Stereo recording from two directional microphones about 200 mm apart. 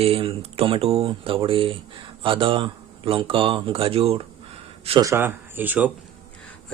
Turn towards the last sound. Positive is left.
turn(degrees=-10)  # may be behind; listen again after turning